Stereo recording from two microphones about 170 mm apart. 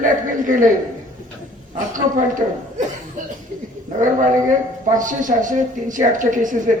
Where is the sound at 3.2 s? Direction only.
50° right (ahead or behind).